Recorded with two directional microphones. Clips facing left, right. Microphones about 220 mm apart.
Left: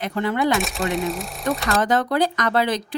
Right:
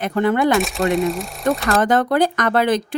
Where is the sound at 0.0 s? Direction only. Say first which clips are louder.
Right 5 dB; 55° right (ahead or behind).